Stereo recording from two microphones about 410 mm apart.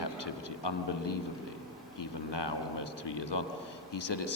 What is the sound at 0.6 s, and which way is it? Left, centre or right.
A man's voice, left.